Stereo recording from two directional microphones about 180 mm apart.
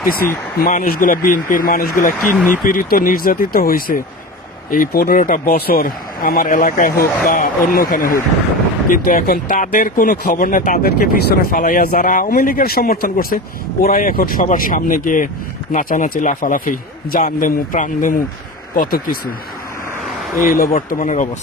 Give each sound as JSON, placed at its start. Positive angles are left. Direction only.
{"t": 0.1, "sound": "speech", "side_deg": 55}
{"t": 20.3, "sound": "speech", "side_deg": 50}